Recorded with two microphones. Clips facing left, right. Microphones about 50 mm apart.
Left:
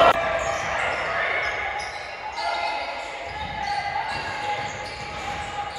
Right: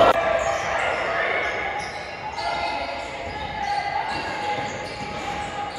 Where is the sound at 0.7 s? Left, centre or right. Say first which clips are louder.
Right 2 dB; centre.